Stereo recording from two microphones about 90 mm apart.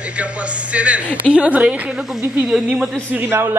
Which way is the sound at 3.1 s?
25° right (ahead or behind).